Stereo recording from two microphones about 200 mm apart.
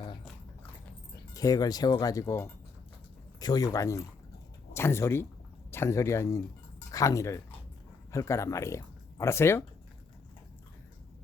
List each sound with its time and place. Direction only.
1.3 s speech: 20° left (ahead or behind)